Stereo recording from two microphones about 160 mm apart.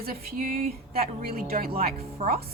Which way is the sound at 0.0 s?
70° right (ahead or behind).